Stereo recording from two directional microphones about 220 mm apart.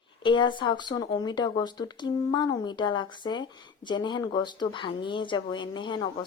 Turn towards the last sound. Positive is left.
turn(degrees=20)  # may be behind; listen again after turning